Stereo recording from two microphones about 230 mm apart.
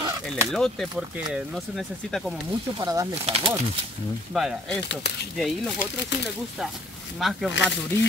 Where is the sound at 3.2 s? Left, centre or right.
Right.